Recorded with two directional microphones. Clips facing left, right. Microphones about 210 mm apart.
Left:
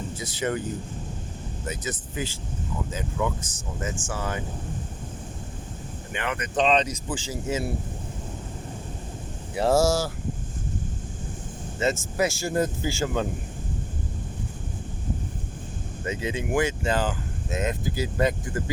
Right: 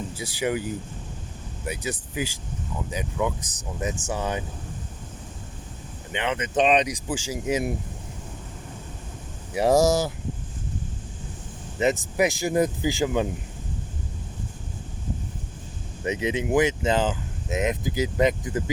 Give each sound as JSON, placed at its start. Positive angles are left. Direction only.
{"t": 0.2, "sound": "speech", "side_deg": -10}
{"t": 1.6, "sound": "speech", "side_deg": -10}
{"t": 6.1, "sound": "speech", "side_deg": -20}
{"t": 9.6, "sound": "speech", "side_deg": -15}
{"t": 11.8, "sound": "speech", "side_deg": -15}
{"t": 16.0, "sound": "speech", "side_deg": -20}